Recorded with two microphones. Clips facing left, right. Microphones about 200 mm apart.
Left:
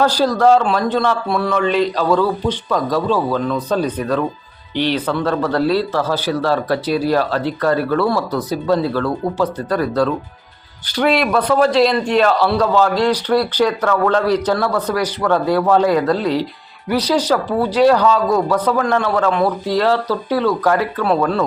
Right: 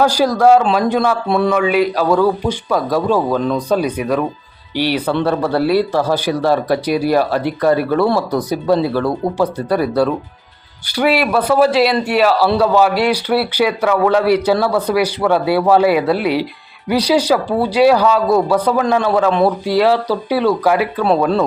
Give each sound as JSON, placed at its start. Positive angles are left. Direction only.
{"t": 0.0, "sound": "speech", "side_deg": -10}
{"t": 1.3, "sound": "speech", "side_deg": -20}
{"t": 1.5, "sound": "speech", "side_deg": -10}
{"t": 21.2, "sound": "speech", "side_deg": -25}